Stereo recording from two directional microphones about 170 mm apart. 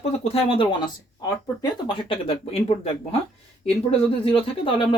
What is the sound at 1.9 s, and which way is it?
Speech, 30° left (ahead or behind).